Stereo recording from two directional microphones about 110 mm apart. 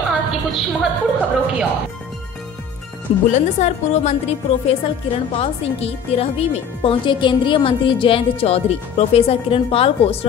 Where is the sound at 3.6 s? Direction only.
90° left.